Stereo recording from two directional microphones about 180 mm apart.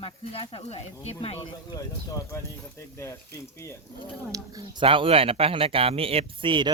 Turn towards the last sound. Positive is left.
turn(degrees=-25)  # may be behind; listen again after turning